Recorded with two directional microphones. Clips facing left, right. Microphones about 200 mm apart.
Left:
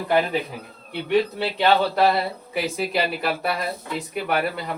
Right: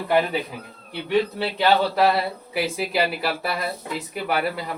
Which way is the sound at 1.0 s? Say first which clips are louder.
Left 1 dB; centre (ahead or behind).